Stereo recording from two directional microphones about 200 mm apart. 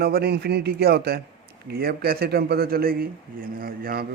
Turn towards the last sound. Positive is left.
turn(degrees=-50)  # may be behind; listen again after turning